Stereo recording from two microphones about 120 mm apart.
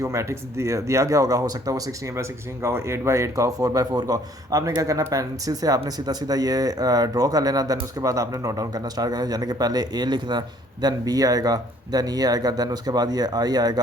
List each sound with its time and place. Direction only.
0.0 s a man's voice: 25° right (ahead or behind)